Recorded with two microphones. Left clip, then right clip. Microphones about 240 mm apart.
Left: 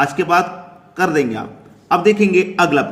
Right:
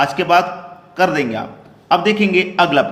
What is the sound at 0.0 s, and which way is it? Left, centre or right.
A man's voice, centre.